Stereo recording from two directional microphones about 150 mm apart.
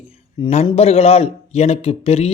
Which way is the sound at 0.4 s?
35° left (ahead or behind).